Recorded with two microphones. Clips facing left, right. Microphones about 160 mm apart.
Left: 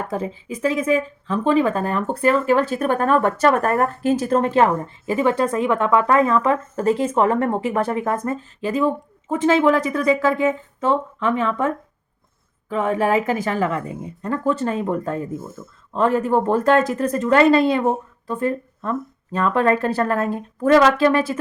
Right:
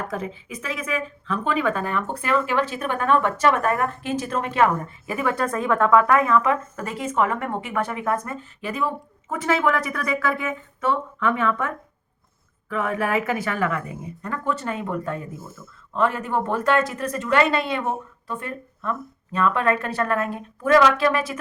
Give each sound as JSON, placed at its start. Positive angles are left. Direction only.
{"t": 0.1, "sound": "speech", "side_deg": 35}